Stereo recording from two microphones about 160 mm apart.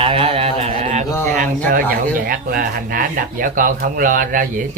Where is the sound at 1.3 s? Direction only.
55° right (ahead or behind).